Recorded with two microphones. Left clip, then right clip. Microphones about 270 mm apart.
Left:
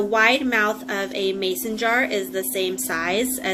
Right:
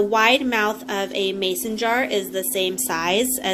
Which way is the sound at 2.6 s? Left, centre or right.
Right.